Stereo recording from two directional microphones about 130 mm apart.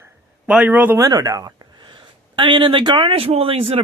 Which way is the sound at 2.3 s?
40° right (ahead or behind).